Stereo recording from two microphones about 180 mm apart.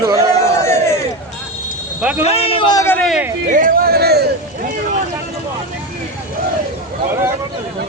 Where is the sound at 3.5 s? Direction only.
50° right (ahead or behind).